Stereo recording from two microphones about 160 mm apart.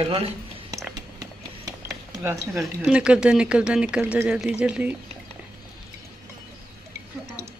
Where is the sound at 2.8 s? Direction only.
5° right (ahead or behind).